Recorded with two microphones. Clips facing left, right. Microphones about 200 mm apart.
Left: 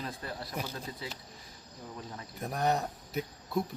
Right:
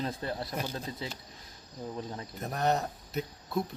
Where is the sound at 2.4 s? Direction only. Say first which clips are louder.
Right 1 dB; 10° left (ahead or behind).